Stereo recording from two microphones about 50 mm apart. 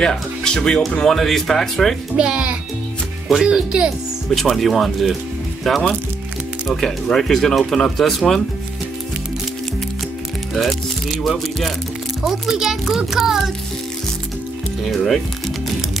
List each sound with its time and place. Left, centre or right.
0.0 s speech: centre
2.1 s speech: right
4.4 s speech: centre
10.5 s speech: centre
12.3 s speech: centre
14.9 s speech: centre